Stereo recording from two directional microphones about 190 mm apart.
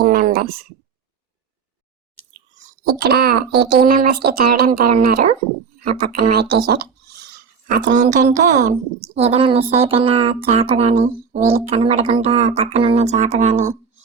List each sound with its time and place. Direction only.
0.0 s a sound: 45° right (ahead or behind)
2.8 s a woman's voice: 55° right (ahead or behind)
7.9 s a woman's voice: 40° right (ahead or behind)